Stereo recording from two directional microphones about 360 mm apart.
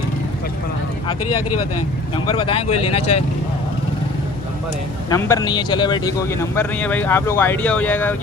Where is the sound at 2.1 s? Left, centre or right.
Centre.